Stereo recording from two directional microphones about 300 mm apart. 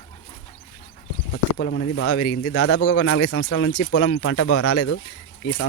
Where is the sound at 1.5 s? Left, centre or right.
Left.